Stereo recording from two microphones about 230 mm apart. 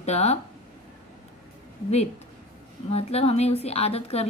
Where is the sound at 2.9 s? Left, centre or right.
Left.